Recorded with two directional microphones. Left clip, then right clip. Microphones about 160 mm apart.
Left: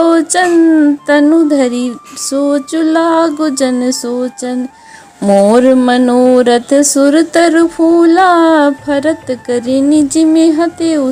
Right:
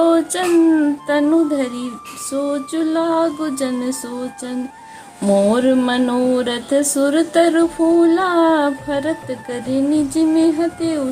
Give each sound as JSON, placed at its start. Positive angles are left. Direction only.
{"t": 0.0, "sound": "speech", "side_deg": 35}